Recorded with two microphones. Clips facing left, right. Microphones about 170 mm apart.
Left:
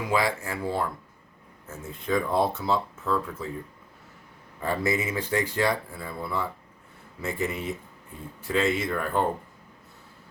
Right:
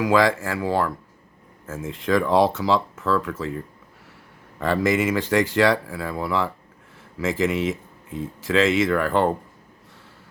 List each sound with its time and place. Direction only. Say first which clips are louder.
0.0 s speech: right 7 dB; 90° right
4.6 s speech: right 6 dB; 90° right